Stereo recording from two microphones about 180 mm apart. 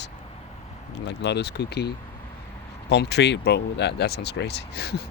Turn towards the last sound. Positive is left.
turn(degrees=60)  # may be behind; listen again after turning